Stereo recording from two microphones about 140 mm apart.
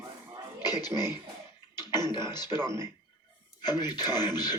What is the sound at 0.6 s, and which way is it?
Speech, 30° left (ahead or behind).